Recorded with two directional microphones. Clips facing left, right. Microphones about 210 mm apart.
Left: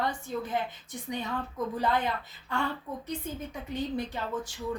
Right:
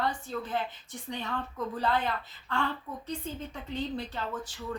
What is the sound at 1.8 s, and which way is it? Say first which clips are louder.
A woman's voice: even; 15° left (ahead or behind).